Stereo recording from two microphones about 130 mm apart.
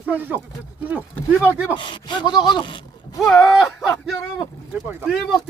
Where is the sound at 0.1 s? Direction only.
15° right (ahead or behind).